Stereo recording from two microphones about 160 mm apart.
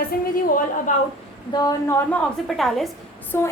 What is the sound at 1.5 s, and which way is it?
Speech, 20° left (ahead or behind).